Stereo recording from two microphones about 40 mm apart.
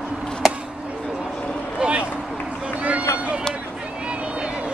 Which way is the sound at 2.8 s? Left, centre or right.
Right.